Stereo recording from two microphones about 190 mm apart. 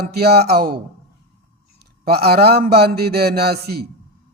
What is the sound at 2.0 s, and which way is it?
A man's voice, 55° right (ahead or behind).